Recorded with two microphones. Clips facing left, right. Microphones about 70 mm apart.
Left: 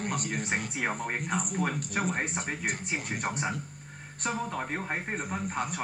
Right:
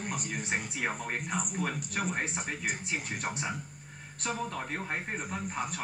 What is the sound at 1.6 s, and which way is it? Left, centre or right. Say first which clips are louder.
Speech: left 3 dB; centre.